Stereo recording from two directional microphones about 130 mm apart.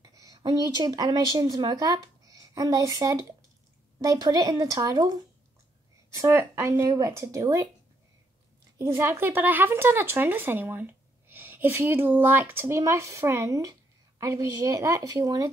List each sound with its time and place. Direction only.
0.0 s speech: 30° right (ahead or behind)
6.1 s speech: 20° right (ahead or behind)
8.7 s speech: 20° right (ahead or behind)